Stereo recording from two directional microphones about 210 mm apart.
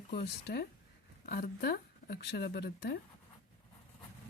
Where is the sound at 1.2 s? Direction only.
45° left (ahead or behind).